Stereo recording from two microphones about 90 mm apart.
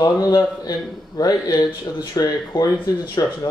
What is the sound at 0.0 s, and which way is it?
Speech, 45° left (ahead or behind).